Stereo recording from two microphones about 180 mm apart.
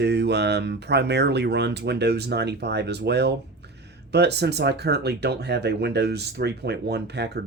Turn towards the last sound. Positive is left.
turn(degrees=-65)  # may be behind; listen again after turning